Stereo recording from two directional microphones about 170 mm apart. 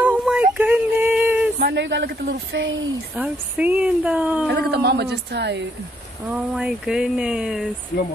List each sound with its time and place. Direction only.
0.0 s a sound: 5° right (ahead or behind)
1.6 s a woman's voice: 85° right
3.2 s speech: 10° right (ahead or behind)
4.5 s speech: 70° right (ahead or behind)
6.2 s speech: 5° right (ahead or behind)